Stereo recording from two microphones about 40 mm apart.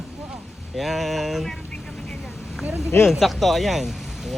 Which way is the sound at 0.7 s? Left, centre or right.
Centre.